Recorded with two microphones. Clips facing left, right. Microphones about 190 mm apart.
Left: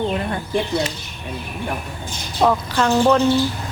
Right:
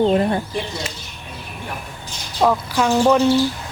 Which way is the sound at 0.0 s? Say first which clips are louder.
Right 6 dB; 25° right (ahead or behind).